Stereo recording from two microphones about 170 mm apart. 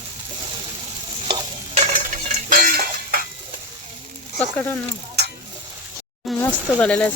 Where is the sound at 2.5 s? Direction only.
55° right (ahead or behind).